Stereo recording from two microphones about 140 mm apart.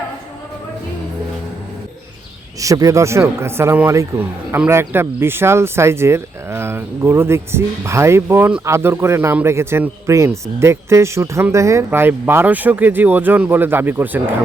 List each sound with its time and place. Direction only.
2.6 s a man's voice: 25° right (ahead or behind)